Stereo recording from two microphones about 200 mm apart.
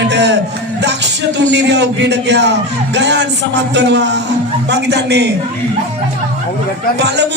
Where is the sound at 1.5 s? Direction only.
60° right (ahead or behind).